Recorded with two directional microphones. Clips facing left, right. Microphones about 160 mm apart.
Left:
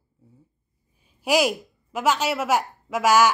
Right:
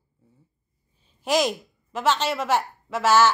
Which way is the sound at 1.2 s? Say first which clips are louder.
Left 2 dB; 10° left (ahead or behind).